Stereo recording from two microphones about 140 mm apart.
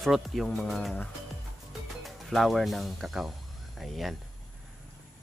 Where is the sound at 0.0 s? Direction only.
Centre (ahead or behind).